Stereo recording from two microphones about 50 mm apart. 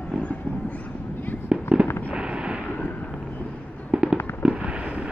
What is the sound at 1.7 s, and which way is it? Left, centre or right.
Fireworks, right.